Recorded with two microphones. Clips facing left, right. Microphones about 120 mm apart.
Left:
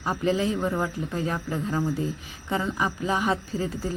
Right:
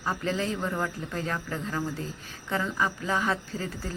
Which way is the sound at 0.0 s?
15° left (ahead or behind).